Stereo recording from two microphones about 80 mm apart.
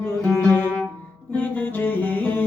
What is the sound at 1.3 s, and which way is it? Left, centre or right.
Music, left.